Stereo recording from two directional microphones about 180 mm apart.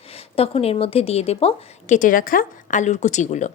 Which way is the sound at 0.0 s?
35° left (ahead or behind).